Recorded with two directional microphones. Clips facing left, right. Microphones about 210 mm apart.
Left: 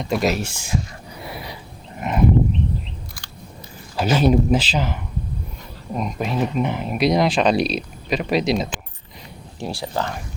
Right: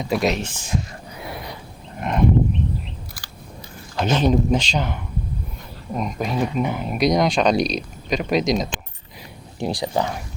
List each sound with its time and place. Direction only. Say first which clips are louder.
0.0 s speech: even; centre (ahead or behind)
1.2 s a sound: right 1 dB; centre (ahead or behind)
2.0 s livestock: even; 5° left (ahead or behind)
3.9 s speech: left 2 dB; 5° left (ahead or behind)
9.6 s speech: right 3 dB; 15° right (ahead or behind)